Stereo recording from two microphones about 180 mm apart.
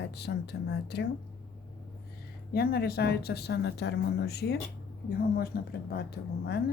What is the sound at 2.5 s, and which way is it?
Speech, 60° left (ahead or behind).